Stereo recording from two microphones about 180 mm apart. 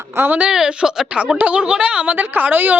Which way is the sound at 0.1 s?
10° right (ahead or behind).